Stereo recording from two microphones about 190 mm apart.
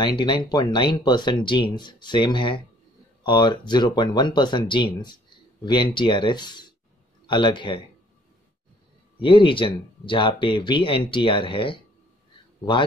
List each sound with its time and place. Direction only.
0.0 s speech: 25° left (ahead or behind)
9.2 s speech: 25° left (ahead or behind)